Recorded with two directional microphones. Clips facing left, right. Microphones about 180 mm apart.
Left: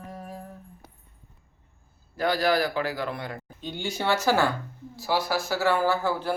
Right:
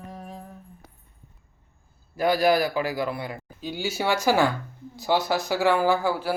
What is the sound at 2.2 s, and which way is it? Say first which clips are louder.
Speech: right 3 dB; 10° right (ahead or behind).